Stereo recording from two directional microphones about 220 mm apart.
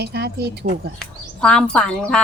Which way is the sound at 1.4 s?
5° left (ahead or behind).